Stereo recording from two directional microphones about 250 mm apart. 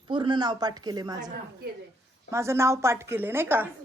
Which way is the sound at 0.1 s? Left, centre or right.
Centre.